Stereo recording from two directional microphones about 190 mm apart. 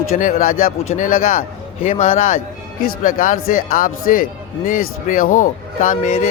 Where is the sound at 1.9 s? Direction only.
35° left (ahead or behind).